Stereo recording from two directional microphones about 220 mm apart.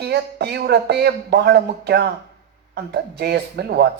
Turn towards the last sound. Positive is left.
turn(degrees=-45)  # may be behind; listen again after turning